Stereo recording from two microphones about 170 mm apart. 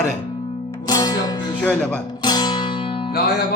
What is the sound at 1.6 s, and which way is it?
Speech, 5° left (ahead or behind).